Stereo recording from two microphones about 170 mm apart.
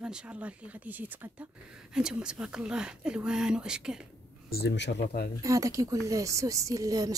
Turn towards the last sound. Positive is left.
turn(degrees=-20)  # may be behind; listen again after turning